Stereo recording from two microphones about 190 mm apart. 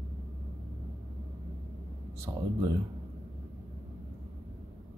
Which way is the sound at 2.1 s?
20° right (ahead or behind).